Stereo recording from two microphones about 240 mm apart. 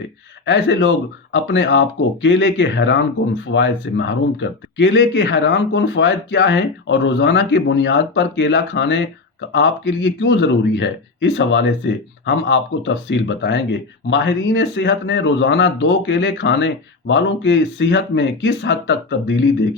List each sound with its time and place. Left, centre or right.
0.4 s speech: left